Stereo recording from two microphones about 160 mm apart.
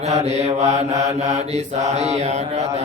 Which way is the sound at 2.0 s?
45° right (ahead or behind).